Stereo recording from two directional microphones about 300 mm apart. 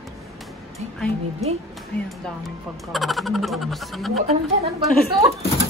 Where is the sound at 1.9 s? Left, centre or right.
Centre.